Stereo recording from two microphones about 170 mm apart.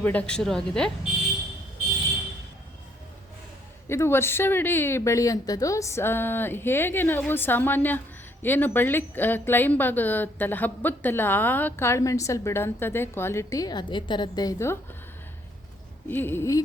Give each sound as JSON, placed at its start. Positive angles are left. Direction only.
{"t": 0.0, "sound": "speech", "side_deg": 10}
{"t": 3.8, "sound": "speech", "side_deg": 15}
{"t": 16.0, "sound": "speech", "side_deg": 10}